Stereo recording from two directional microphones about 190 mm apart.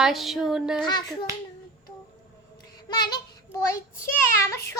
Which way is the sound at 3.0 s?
20° left (ahead or behind).